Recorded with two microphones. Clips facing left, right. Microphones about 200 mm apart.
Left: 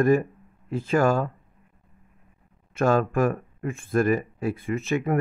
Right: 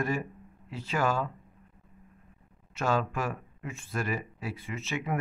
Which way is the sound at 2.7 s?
50° left (ahead or behind).